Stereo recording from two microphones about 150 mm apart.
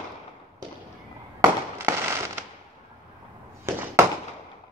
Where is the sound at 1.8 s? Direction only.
20° right (ahead or behind).